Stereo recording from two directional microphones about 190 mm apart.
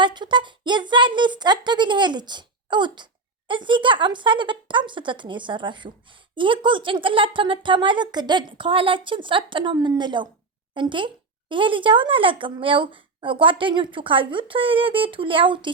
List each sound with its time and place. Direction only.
0.0 s speech: 25° right (ahead or behind)